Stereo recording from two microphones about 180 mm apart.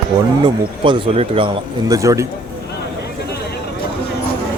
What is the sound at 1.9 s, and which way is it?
Speech, 15° right (ahead or behind).